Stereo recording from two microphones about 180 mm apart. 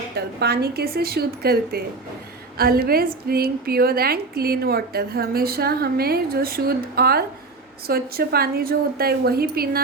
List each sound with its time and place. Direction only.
0.2 s a woman's voice: 65° right (ahead or behind)